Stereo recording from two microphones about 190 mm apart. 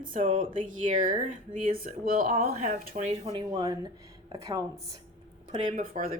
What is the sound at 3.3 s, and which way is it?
A woman's voice, 20° right (ahead or behind).